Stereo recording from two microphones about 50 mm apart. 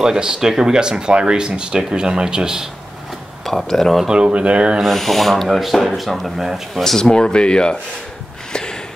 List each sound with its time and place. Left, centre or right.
0.0 s speech: centre
3.4 s speech: centre
4.1 s speech: right
4.8 s speech: centre
6.8 s speech: centre